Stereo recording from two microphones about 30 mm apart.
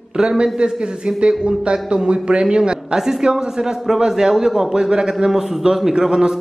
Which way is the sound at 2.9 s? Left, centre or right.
Right.